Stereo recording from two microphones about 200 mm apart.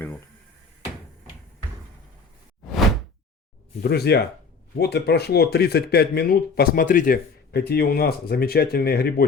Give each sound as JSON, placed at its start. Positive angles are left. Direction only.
{"t": 3.8, "sound": "speech", "side_deg": 50}